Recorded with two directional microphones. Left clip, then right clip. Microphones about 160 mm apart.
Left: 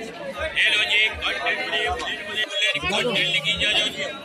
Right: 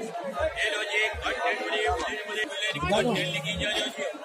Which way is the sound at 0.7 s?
45° right (ahead or behind).